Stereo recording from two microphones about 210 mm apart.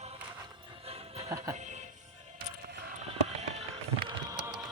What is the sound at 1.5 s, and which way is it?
Music, 35° right (ahead or behind).